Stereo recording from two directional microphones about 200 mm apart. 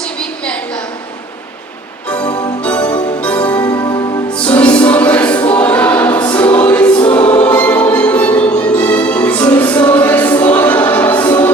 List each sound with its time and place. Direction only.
0.0 s a sound: 5° left (ahead or behind)
2.6 s music: 5° left (ahead or behind)
3.8 s music: 20° left (ahead or behind)
4.4 s choir: 5° left (ahead or behind)